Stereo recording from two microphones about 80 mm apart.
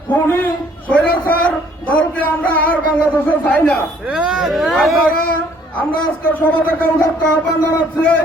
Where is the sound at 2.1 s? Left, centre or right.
Left.